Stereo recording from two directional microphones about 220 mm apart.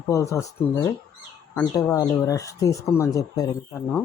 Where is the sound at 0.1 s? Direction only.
15° left (ahead or behind).